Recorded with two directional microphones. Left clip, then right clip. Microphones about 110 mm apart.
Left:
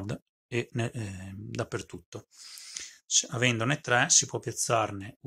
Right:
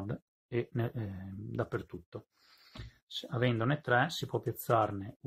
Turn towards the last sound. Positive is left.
turn(degrees=40)  # may be behind; listen again after turning